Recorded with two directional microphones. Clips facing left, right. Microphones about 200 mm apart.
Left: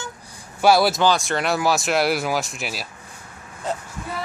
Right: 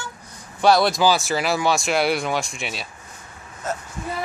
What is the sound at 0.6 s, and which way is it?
Speech, 5° left (ahead or behind).